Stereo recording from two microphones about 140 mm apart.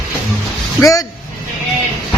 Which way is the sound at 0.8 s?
25° left (ahead or behind).